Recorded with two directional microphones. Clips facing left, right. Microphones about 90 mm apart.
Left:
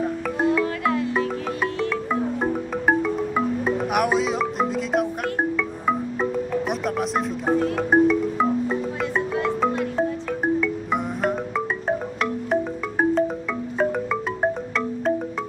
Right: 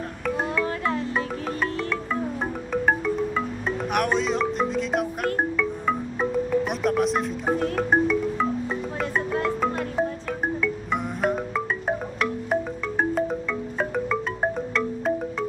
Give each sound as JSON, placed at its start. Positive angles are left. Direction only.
{"t": 0.7, "sound": "music", "side_deg": -30}
{"t": 2.4, "sound": "music", "side_deg": 5}
{"t": 7.7, "sound": "marimba", "side_deg": 5}
{"t": 9.1, "sound": "music", "side_deg": 0}
{"t": 13.7, "sound": "marimba", "side_deg": 5}